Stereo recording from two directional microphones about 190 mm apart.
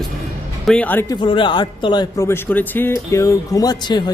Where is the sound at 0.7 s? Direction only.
10° left (ahead or behind).